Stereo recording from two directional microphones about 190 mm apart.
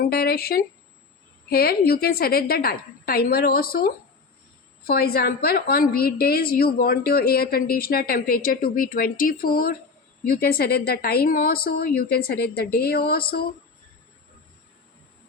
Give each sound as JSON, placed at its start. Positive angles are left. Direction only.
{"t": 0.0, "sound": "a woman's voice", "side_deg": 55}